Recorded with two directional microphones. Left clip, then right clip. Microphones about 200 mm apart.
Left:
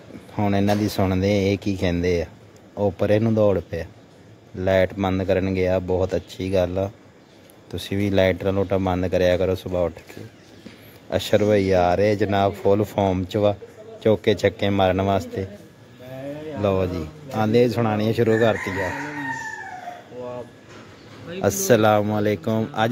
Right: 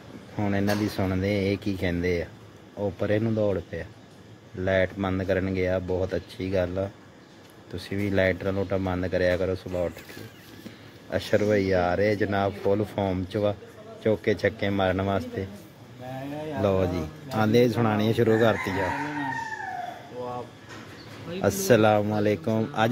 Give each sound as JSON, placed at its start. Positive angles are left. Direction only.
{"t": 0.4, "sound": "speech", "side_deg": 15}
{"t": 11.1, "sound": "speech", "side_deg": 15}
{"t": 16.6, "sound": "speech", "side_deg": 5}
{"t": 21.3, "sound": "speech", "side_deg": 10}